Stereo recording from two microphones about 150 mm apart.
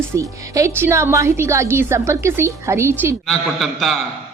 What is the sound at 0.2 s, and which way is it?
A woman's voice, 20° right (ahead or behind).